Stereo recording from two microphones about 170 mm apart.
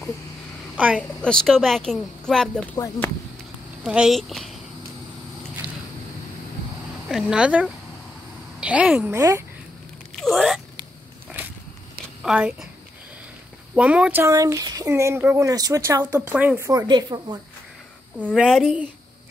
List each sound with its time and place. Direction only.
0.7 s a woman's voice: 10° right (ahead or behind)
1.2 s speech: 5° left (ahead or behind)
3.8 s speech: 5° right (ahead or behind)
7.1 s a woman's voice: 5° right (ahead or behind)
10.1 s speech: centre (ahead or behind)
12.2 s a woman's voice: 5° right (ahead or behind)
13.7 s a woman's voice: 5° right (ahead or behind)
14.2 s a woman's voice: 20° right (ahead or behind)
18.2 s speech: 5° right (ahead or behind)